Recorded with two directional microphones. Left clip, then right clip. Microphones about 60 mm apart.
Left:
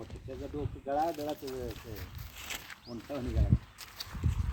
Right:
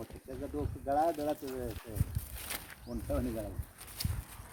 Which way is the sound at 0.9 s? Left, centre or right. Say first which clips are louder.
Right 1 dB; right.